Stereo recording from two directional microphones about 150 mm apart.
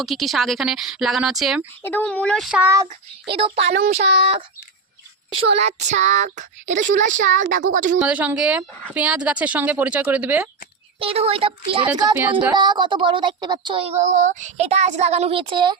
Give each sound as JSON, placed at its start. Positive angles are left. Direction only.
{"t": 0.0, "sound": "speech", "side_deg": 0}
{"t": 1.8, "sound": "speech", "side_deg": 10}
{"t": 2.5, "sound": "speech", "side_deg": -10}
{"t": 2.8, "sound": "speech", "side_deg": -35}
{"t": 5.5, "sound": "a woman's voice", "side_deg": -50}
{"t": 8.0, "sound": "speech", "side_deg": -10}
{"t": 11.0, "sound": "speech", "side_deg": -40}
{"t": 14.0, "sound": "speech", "side_deg": -50}